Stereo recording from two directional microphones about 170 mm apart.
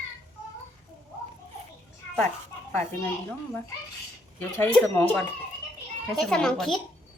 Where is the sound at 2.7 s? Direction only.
10° left (ahead or behind).